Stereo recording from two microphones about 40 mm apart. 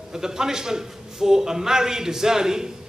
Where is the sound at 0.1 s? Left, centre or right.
Centre.